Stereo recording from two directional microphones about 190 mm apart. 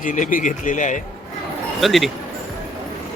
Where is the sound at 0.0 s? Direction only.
45° left (ahead or behind).